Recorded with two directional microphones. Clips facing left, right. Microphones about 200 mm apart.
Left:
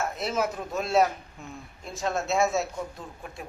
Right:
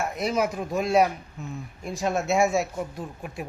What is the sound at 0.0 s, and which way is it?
Speech, 10° right (ahead or behind).